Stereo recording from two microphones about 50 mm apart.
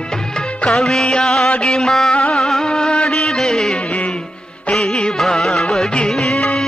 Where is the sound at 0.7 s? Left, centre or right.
Centre.